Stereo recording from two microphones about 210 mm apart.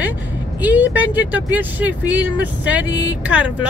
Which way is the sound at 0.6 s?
10° right (ahead or behind).